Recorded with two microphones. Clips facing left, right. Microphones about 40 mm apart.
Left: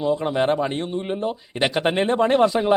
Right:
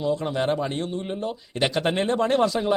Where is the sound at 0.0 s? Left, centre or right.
Centre.